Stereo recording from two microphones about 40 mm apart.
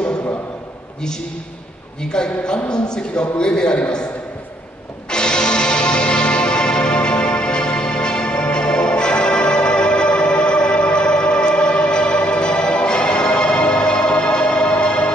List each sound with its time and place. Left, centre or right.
2.0 s a man's voice: centre
5.1 s music: left